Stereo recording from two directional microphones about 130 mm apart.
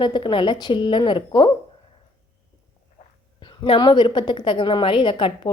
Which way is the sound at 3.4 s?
40° left (ahead or behind).